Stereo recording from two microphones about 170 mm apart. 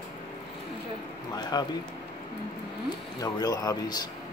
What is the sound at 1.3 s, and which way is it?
Speech, 25° left (ahead or behind).